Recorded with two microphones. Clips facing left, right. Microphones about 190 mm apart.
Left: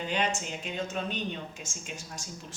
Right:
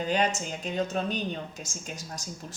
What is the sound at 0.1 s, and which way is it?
A woman's voice, 40° right (ahead or behind).